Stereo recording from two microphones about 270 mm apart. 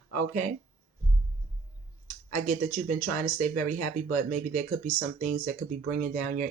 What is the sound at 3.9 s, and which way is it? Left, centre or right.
Speech, right.